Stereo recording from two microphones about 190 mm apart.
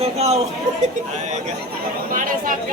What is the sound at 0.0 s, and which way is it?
Speech, 35° right (ahead or behind).